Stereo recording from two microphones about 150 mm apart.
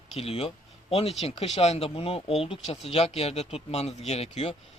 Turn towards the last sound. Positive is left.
turn(degrees=45)  # may be behind; listen again after turning